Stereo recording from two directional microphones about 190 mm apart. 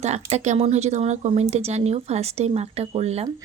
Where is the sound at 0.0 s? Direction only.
35° right (ahead or behind).